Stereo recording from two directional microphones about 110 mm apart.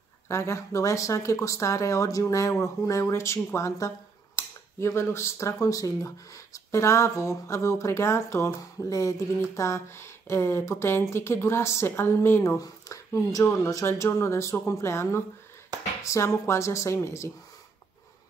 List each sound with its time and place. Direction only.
0.3 s a woman's voice: 25° left (ahead or behind)